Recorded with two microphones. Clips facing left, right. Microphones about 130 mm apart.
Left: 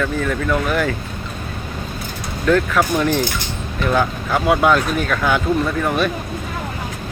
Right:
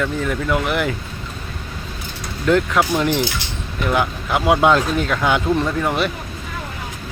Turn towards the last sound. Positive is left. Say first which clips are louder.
# left 1 dB
turn(degrees=-15)  # may be behind; listen again after turning